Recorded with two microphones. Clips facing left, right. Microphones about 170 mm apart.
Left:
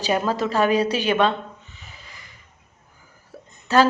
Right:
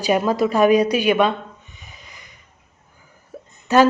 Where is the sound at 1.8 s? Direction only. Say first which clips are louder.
Right 1 dB; 15° right (ahead or behind).